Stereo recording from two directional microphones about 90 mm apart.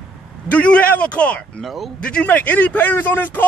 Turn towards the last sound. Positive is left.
turn(degrees=20)  # may be behind; listen again after turning